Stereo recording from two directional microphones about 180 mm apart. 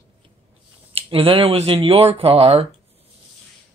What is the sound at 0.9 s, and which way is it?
Speech, 30° right (ahead or behind).